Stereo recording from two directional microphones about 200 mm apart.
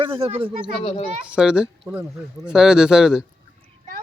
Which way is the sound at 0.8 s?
25° left (ahead or behind).